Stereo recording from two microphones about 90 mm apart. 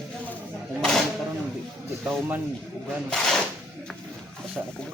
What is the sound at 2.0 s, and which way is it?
Speech, 20° right (ahead or behind).